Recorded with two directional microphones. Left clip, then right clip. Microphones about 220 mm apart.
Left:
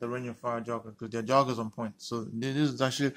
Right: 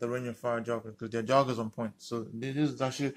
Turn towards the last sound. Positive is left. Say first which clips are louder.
# left 3 dB
turn(degrees=20)  # may be behind; listen again after turning